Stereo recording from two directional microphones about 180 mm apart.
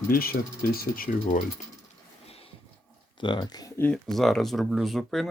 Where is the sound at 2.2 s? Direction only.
35° left (ahead or behind).